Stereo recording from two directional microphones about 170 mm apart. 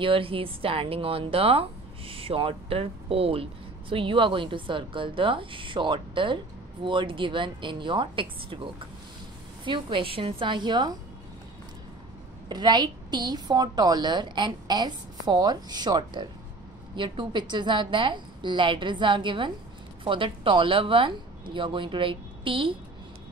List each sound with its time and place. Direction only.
0.0 s a woman's voice: 30° right (ahead or behind)
12.4 s a woman's voice: 25° right (ahead or behind)